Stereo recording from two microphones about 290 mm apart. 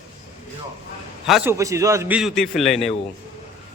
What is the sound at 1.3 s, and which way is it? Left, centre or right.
Speech, centre.